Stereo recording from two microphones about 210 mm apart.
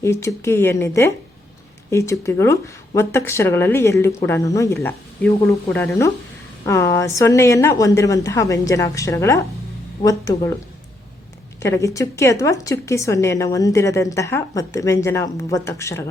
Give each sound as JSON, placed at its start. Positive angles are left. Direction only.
{"t": 0.0, "sound": "a woman's voice", "side_deg": 15}
{"t": 11.6, "sound": "a woman's voice", "side_deg": 15}